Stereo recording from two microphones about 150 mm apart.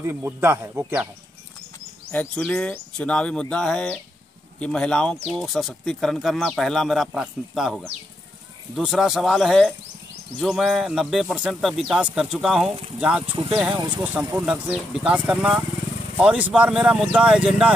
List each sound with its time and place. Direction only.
0.0 s speech: 15° right (ahead or behind)
2.1 s speech: 5° left (ahead or behind)
13.3 s speech: 35° right (ahead or behind)
13.7 s speech: 15° right (ahead or behind)